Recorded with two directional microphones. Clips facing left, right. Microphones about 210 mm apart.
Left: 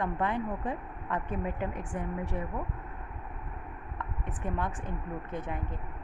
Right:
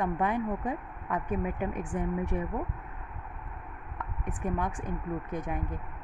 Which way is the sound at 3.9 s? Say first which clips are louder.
Right 2 dB; 15° right (ahead or behind).